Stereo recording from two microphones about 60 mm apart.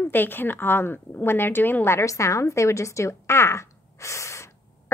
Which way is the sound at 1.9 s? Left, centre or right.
Left.